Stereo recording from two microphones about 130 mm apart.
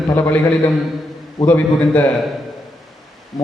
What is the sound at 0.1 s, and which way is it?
A man's voice, 15° left (ahead or behind).